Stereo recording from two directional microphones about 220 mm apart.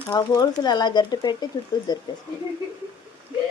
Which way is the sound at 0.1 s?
15° left (ahead or behind).